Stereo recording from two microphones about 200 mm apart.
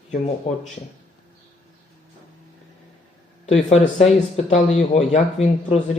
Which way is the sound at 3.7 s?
35° left (ahead or behind).